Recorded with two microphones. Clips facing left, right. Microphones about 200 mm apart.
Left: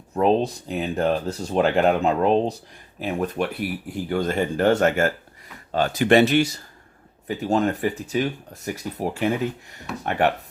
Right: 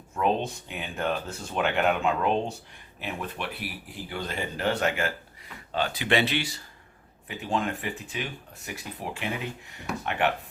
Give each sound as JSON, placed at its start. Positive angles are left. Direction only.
{"t": 0.1, "sound": "speech", "side_deg": 35}